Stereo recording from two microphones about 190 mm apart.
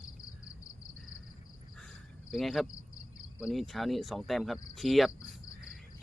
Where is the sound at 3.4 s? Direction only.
Centre (ahead or behind).